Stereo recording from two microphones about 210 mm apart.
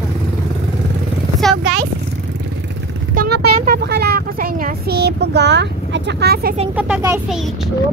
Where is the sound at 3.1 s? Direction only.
45° right (ahead or behind).